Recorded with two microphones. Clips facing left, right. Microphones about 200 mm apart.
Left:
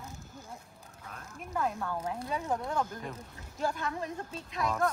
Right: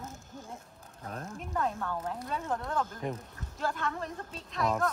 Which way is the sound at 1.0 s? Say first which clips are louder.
Right 8 dB; 40° right (ahead or behind).